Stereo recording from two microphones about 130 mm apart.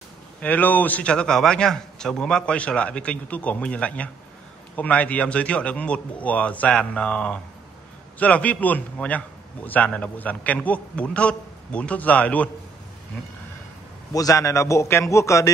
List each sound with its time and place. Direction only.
0.4 s a man's voice: 15° left (ahead or behind)
14.1 s a man's voice: 25° left (ahead or behind)